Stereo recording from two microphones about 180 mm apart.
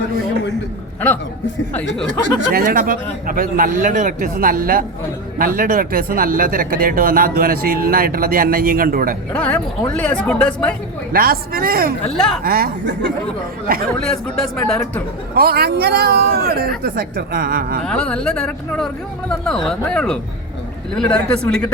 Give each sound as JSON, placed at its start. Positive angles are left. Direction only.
{"t": 2.5, "sound": "speech", "side_deg": -55}
{"t": 9.3, "sound": "speech", "side_deg": 10}
{"t": 11.1, "sound": "speech", "side_deg": -55}
{"t": 12.1, "sound": "speech", "side_deg": 0}
{"t": 12.4, "sound": "speech", "side_deg": -55}
{"t": 13.7, "sound": "speech", "side_deg": -55}
{"t": 14.0, "sound": "speech", "side_deg": 5}
{"t": 15.4, "sound": "speech", "side_deg": -60}
{"t": 17.8, "sound": "speech", "side_deg": 5}